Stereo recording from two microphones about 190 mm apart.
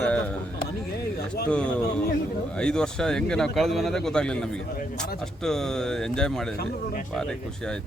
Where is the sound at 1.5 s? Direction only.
5° left (ahead or behind).